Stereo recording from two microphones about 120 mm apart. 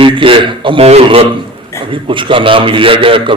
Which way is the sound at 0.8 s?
60° right (ahead or behind).